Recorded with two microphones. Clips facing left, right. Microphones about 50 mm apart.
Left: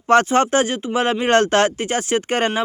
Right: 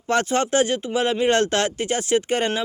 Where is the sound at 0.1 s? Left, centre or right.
Left.